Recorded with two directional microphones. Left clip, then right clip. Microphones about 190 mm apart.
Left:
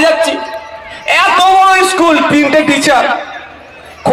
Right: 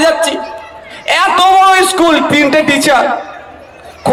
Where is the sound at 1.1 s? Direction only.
25° left (ahead or behind).